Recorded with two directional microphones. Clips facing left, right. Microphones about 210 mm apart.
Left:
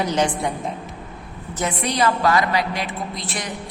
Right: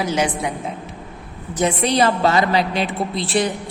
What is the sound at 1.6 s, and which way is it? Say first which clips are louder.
A woman's voice: right 5 dB; 25° right (ahead or behind).